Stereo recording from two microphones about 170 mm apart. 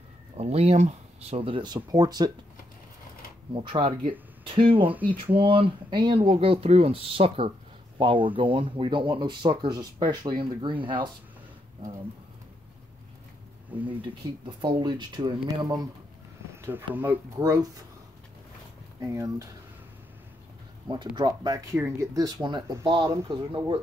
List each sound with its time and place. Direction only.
0.4 s speech: 35° right (ahead or behind)
3.5 s speech: 30° right (ahead or behind)
14.2 s speech: 25° right (ahead or behind)
16.6 s speech: 10° right (ahead or behind)
18.9 s speech: 20° right (ahead or behind)
20.9 s speech: 25° right (ahead or behind)